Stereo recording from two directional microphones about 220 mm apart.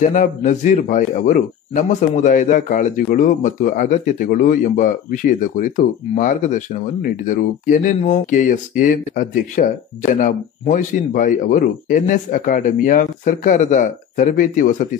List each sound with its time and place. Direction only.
0.1 s a man's voice: 35° left (ahead or behind)